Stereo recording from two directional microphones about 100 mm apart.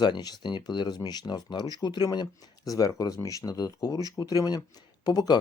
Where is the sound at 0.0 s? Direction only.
45° left (ahead or behind).